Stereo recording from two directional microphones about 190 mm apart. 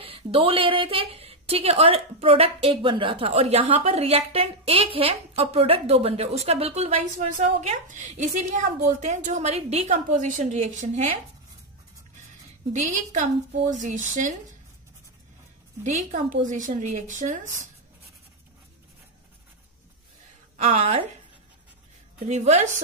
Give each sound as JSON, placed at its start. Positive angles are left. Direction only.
{"t": 0.0, "sound": "a woman's voice", "side_deg": -30}
{"t": 12.7, "sound": "a woman's voice", "side_deg": -40}
{"t": 15.8, "sound": "a woman's voice", "side_deg": -40}
{"t": 20.5, "sound": "a woman's voice", "side_deg": -35}
{"t": 22.3, "sound": "a woman's voice", "side_deg": -35}